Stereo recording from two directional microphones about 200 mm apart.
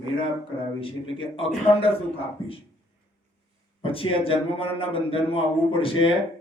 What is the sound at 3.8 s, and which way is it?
A man's voice, 25° left (ahead or behind).